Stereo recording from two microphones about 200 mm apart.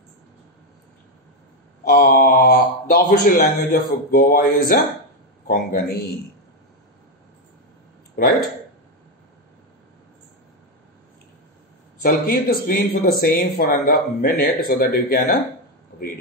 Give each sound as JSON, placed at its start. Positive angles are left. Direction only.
{"t": 1.9, "sound": "speech", "side_deg": 45}
{"t": 12.0, "sound": "speech", "side_deg": 45}